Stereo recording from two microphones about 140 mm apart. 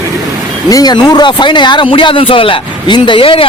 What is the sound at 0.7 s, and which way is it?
Speech, 25° left (ahead or behind).